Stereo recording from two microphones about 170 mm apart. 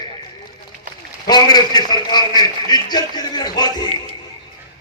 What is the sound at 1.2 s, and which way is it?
A man's voice, 25° left (ahead or behind).